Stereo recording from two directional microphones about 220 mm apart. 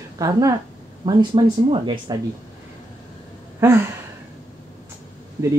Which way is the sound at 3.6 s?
10° right (ahead or behind).